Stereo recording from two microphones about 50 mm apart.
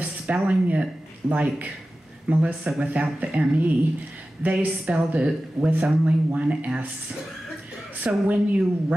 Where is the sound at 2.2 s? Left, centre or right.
Right.